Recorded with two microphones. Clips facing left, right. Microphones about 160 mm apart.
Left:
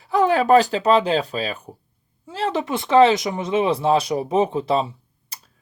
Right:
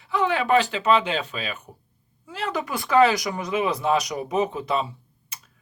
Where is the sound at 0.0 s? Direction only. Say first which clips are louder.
Left 6 dB; 40° left (ahead or behind).